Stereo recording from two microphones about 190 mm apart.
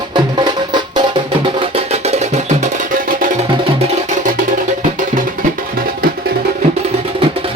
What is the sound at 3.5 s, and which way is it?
Music, 25° right (ahead or behind).